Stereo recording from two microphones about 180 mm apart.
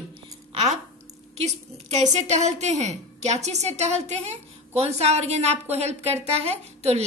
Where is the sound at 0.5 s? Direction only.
35° right (ahead or behind).